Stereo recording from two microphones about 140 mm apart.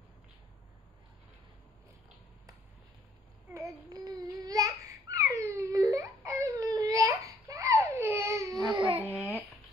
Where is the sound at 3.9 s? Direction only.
25° right (ahead or behind).